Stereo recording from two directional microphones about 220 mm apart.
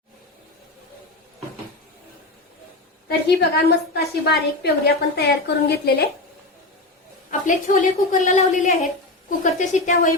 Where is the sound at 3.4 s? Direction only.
50° left (ahead or behind).